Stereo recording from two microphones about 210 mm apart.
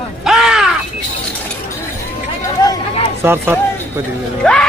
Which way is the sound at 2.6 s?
15° left (ahead or behind).